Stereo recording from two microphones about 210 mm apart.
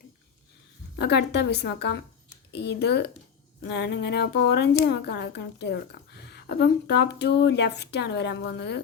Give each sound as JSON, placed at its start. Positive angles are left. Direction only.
{"t": 0.9, "sound": "a woman's voice", "side_deg": 50}